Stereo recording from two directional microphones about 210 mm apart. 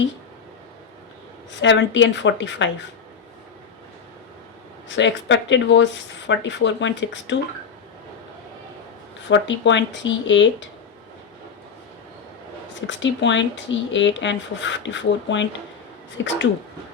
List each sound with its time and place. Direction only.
1.6 s speech: 60° left (ahead or behind)
4.9 s speech: 60° left (ahead or behind)
9.3 s speech: 60° left (ahead or behind)
12.9 s speech: 60° left (ahead or behind)